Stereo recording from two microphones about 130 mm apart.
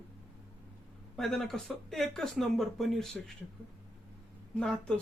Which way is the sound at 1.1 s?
5° left (ahead or behind).